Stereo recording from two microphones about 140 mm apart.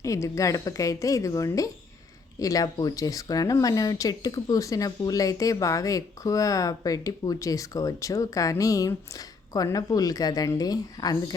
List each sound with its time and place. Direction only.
0.0 s speech: 20° left (ahead or behind)